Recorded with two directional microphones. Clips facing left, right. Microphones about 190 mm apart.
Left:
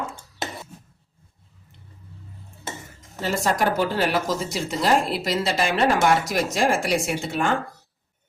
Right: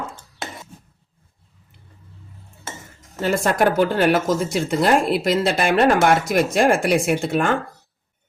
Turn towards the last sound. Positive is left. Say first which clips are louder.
# right 5 dB
turn(degrees=-55)  # may be behind; listen again after turning